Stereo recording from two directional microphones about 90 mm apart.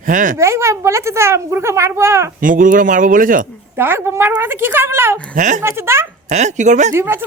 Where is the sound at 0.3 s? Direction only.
30° right (ahead or behind).